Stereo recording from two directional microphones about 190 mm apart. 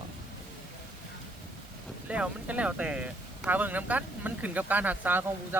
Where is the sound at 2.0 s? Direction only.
5° right (ahead or behind).